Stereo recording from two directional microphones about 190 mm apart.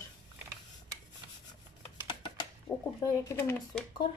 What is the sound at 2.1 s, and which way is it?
Typing, 20° left (ahead or behind).